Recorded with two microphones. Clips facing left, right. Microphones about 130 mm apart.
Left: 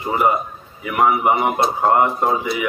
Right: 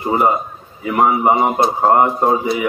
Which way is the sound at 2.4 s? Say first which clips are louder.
Right 4 dB; 30° right (ahead or behind).